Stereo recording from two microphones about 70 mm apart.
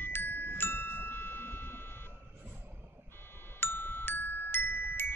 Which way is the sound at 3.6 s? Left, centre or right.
Left.